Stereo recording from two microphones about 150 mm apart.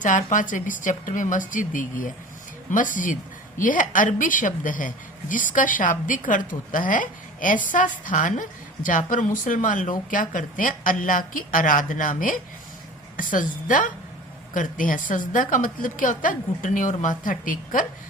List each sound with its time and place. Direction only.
0.0 s a woman's voice: 60° left (ahead or behind)